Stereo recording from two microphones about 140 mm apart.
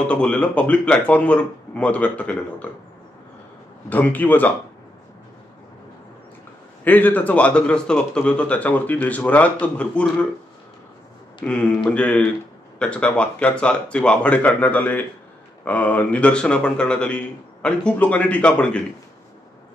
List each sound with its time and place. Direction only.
0.0 s speech: 5° left (ahead or behind)
3.9 s speech: 10° left (ahead or behind)
6.8 s speech: 10° left (ahead or behind)
11.4 s speech: 10° left (ahead or behind)